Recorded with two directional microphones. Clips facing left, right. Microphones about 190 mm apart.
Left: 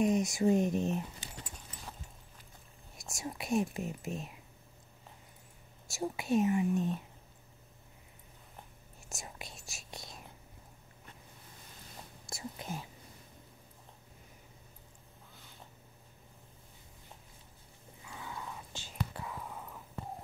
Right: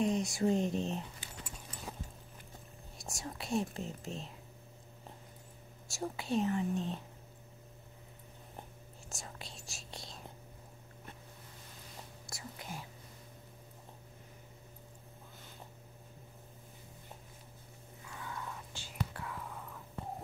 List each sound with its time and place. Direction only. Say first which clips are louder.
0.0 s speech: left 3 dB; 15° left (ahead or behind)
3.2 s speech: left 3 dB; 15° left (ahead or behind)
5.9 s speech: left 4 dB; 15° left (ahead or behind)
9.1 s whispering: left 2 dB; 15° left (ahead or behind)
12.3 s whispering: left 5 dB; 25° left (ahead or behind)
18.0 s whispering: even; 20° left (ahead or behind)